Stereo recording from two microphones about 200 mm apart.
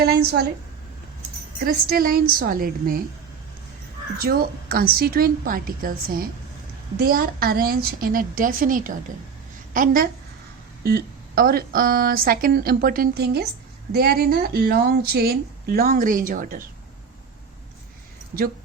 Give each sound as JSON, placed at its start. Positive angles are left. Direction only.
{"t": 0.0, "sound": "speech", "side_deg": -55}
{"t": 1.5, "sound": "speech", "side_deg": -45}
{"t": 4.2, "sound": "speech", "side_deg": -50}